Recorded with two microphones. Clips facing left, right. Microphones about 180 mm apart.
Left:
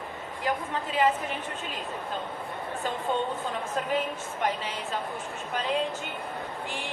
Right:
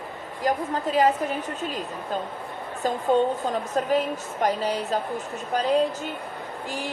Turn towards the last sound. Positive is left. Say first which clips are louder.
# right 3 dB
turn(degrees=-40)  # may be behind; listen again after turning